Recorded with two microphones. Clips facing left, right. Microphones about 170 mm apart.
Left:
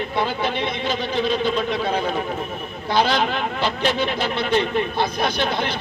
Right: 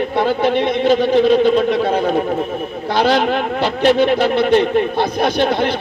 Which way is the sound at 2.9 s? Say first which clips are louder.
Right 5 dB; 65° right (ahead or behind).